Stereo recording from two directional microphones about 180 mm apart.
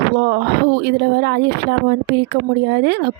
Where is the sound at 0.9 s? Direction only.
65° right (ahead or behind).